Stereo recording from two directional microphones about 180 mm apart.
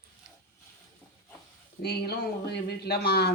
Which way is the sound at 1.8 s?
65° left (ahead or behind).